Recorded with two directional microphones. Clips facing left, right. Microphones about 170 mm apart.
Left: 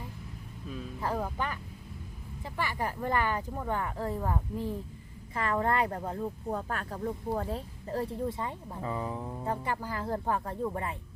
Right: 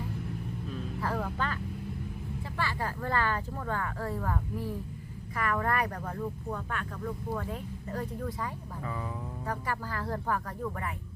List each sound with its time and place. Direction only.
1.0 s speech: 20° left (ahead or behind)
2.6 s speech: 15° left (ahead or behind)
6.6 s speech: 35° left (ahead or behind)